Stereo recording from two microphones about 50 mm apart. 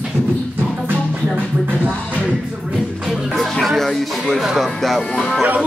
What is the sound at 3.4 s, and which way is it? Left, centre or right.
Music, centre.